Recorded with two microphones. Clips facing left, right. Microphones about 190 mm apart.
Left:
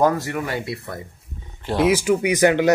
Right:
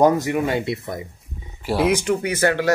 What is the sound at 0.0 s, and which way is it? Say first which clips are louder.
Speech: right 3 dB; 20° right (ahead or behind).